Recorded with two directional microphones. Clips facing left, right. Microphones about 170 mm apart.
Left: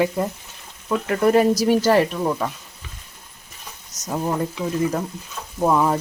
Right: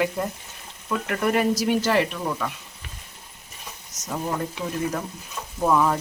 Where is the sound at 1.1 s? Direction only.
35° left (ahead or behind).